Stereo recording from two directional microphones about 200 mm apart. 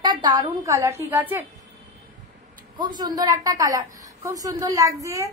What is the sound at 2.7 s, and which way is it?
A woman's voice, 20° right (ahead or behind).